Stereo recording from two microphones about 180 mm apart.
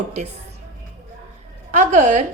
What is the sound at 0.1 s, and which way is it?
Speech, 40° right (ahead or behind).